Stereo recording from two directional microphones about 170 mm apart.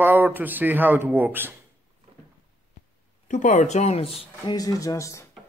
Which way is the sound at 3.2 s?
50° left (ahead or behind).